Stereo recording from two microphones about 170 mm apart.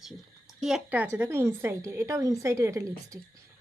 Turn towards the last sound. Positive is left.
turn(degrees=-20)  # may be behind; listen again after turning